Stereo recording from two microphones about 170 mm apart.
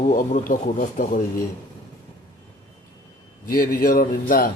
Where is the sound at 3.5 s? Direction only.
55° left (ahead or behind).